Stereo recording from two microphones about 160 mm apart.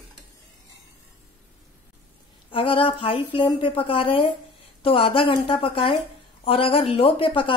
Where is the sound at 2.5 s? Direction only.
35° left (ahead or behind).